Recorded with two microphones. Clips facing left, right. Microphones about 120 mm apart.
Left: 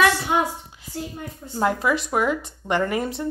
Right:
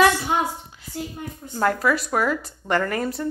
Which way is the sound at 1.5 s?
15° left (ahead or behind).